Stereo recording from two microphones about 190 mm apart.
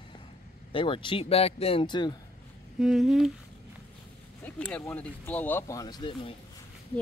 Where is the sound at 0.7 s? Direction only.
25° left (ahead or behind).